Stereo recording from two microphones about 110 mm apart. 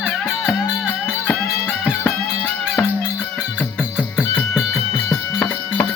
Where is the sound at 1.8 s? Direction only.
10° left (ahead or behind).